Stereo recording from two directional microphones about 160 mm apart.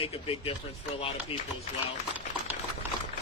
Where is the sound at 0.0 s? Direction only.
35° left (ahead or behind).